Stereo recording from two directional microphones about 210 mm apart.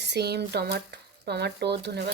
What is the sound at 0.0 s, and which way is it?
Speech, 55° right (ahead or behind).